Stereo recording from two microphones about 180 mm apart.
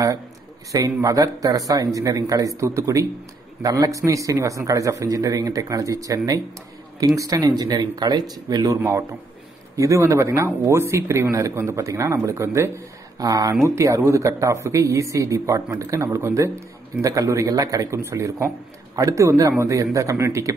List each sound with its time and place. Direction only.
0.7 s a man's voice: 20° right (ahead or behind)